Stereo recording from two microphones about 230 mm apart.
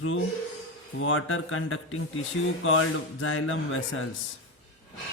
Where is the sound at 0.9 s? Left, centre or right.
Left.